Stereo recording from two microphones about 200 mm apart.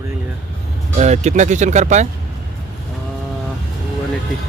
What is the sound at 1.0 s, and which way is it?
Speech, 35° right (ahead or behind).